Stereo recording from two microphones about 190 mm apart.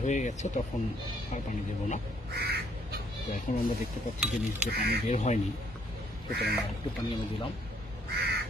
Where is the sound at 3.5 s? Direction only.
35° left (ahead or behind).